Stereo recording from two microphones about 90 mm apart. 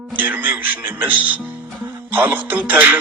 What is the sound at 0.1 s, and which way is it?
A man's voice, 20° right (ahead or behind).